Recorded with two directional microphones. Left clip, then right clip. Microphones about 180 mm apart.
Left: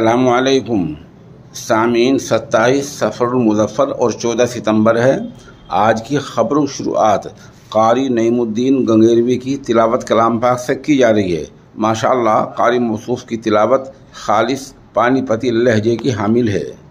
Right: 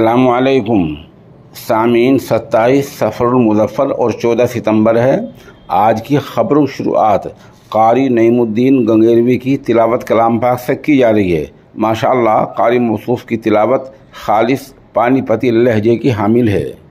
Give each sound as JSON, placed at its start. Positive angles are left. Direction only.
{"t": 0.3, "sound": "speech", "side_deg": -25}
{"t": 0.7, "sound": "speech", "side_deg": -10}
{"t": 1.5, "sound": "speech", "side_deg": -20}